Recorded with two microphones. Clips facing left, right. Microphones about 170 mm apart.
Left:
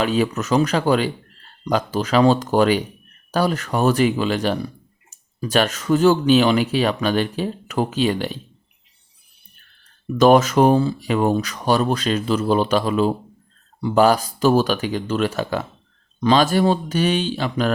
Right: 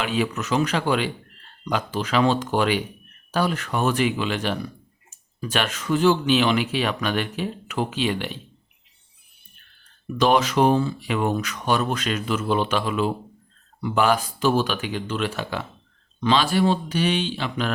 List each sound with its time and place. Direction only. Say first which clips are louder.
0.0 s speech: left 5 dB; 40° left (ahead or behind)
10.2 s speech: left 5 dB; 45° left (ahead or behind)